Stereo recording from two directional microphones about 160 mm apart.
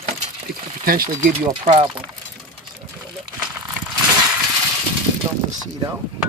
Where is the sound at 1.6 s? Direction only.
30° right (ahead or behind).